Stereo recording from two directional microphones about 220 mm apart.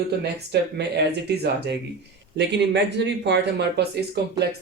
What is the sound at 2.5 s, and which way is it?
Speech, 50° right (ahead or behind).